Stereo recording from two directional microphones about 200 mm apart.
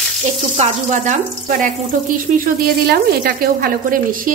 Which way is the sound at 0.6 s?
35° right (ahead or behind).